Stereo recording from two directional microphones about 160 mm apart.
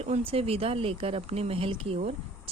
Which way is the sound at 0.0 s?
40° right (ahead or behind).